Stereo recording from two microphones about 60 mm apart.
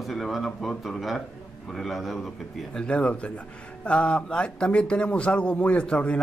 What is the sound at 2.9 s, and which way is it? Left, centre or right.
A man's voice, centre.